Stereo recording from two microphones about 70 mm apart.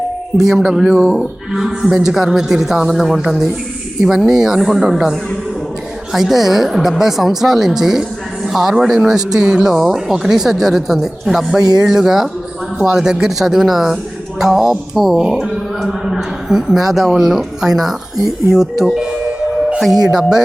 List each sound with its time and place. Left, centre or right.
0.3 s speech: centre
6.1 s speech: centre
20.1 s speech: centre